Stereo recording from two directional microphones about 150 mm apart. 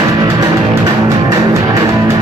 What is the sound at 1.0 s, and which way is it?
Music, 20° right (ahead or behind).